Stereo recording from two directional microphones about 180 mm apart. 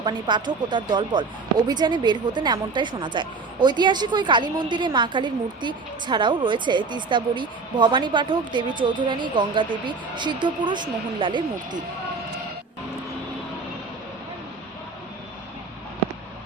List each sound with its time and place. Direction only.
0.0 s a woman's voice: 25° right (ahead or behind)